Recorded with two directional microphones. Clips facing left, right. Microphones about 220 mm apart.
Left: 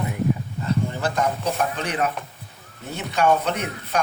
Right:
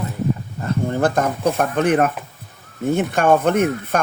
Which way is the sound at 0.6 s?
50° right (ahead or behind).